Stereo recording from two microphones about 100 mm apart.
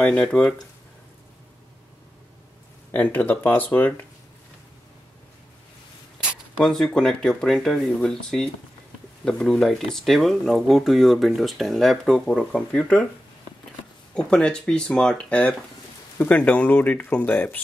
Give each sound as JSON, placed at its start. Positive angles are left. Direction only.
{"t": 0.0, "sound": "speech", "side_deg": 10}
{"t": 2.9, "sound": "speech", "side_deg": 20}
{"t": 6.6, "sound": "speech", "side_deg": 5}
{"t": 14.1, "sound": "speech", "side_deg": 10}